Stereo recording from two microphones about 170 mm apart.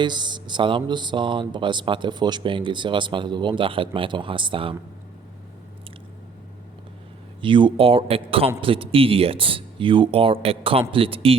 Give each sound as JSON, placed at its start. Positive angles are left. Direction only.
{"t": 0.0, "sound": "speech", "side_deg": -25}
{"t": 7.4, "sound": "speech", "side_deg": -30}